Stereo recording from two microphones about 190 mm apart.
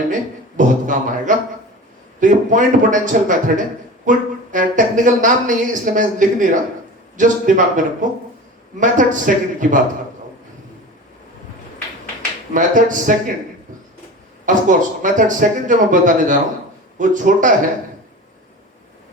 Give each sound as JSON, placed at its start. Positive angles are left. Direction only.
{"t": 0.1, "sound": "a man's voice", "side_deg": -40}
{"t": 12.5, "sound": "speech", "side_deg": -45}
{"t": 14.4, "sound": "speech", "side_deg": -40}